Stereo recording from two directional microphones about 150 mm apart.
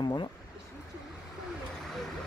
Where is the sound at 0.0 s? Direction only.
30° left (ahead or behind).